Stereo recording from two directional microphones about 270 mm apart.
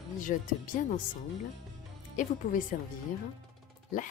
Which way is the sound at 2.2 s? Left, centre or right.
Left.